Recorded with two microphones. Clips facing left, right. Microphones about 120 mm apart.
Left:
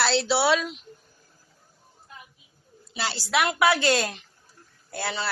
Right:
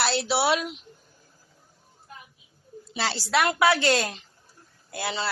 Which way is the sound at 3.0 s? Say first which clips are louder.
Right 1 dB; 35° right (ahead or behind).